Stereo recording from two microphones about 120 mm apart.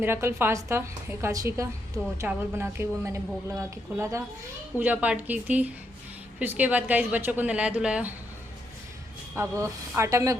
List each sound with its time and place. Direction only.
0.0 s a woman's voice: 20° right (ahead or behind)
4.8 s a woman's voice: 10° right (ahead or behind)
9.3 s a woman's voice: 25° right (ahead or behind)